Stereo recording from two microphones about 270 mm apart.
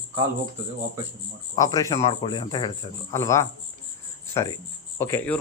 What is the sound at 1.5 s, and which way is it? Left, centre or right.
Speech, centre.